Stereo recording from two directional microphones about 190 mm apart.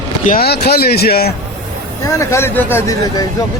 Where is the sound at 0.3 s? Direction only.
55° left (ahead or behind).